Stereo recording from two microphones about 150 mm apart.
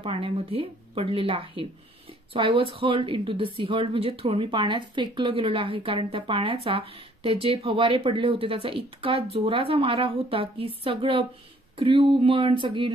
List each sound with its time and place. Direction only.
0.0 s a woman's voice: 40° right (ahead or behind)